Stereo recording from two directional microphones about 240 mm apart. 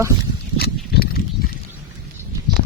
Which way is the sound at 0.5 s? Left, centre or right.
Left.